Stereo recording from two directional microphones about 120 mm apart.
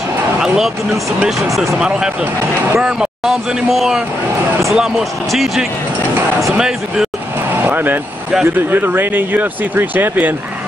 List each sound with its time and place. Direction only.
1.2 s speech: 5° right (ahead or behind)
7.5 s vehicle: 15° right (ahead or behind)
8.5 s speech: 15° right (ahead or behind)